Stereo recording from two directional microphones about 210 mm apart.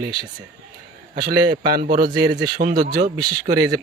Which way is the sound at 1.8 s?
40° right (ahead or behind).